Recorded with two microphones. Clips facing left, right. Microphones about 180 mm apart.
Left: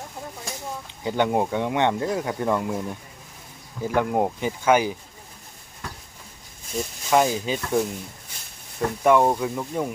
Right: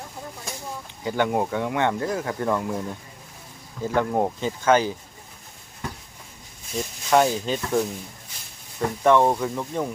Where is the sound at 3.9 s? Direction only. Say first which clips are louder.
Even; 15° left (ahead or behind).